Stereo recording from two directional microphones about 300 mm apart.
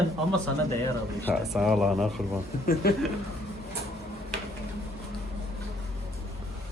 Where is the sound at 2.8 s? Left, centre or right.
Left.